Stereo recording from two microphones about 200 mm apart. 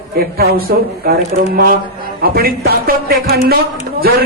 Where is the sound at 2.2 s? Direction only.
50° right (ahead or behind).